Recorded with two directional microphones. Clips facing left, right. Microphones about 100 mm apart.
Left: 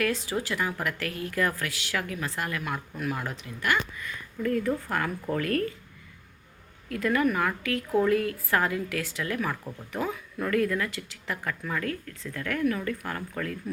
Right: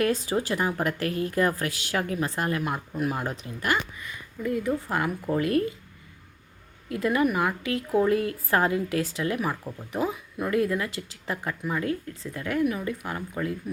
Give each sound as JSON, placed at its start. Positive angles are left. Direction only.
{"t": 0.4, "sound": "a woman's voice", "side_deg": -30}
{"t": 4.4, "sound": "a woman's voice", "side_deg": -10}
{"t": 6.8, "sound": "a woman's voice", "side_deg": -20}